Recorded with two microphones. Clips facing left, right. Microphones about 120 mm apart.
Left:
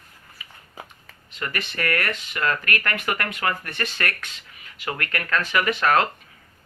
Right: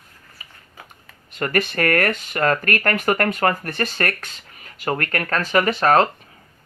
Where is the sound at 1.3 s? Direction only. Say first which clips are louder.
Right 9 dB; 50° right (ahead or behind).